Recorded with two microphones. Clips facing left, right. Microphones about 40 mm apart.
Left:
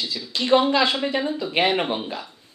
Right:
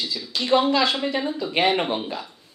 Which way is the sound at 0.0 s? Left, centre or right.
Centre.